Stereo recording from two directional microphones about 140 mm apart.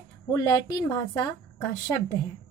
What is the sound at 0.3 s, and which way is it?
A woman's voice, 25° left (ahead or behind).